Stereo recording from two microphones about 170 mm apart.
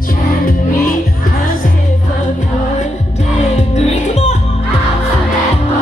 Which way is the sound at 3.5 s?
40° left (ahead or behind).